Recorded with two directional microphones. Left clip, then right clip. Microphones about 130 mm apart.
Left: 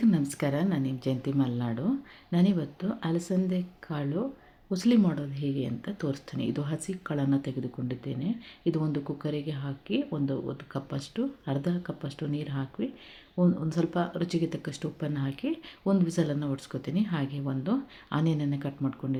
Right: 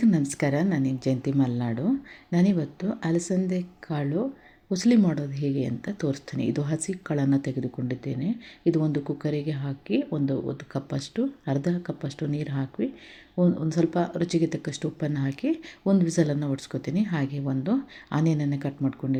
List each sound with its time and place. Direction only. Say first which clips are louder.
0.0 s speech: right 3 dB; 20° right (ahead or behind)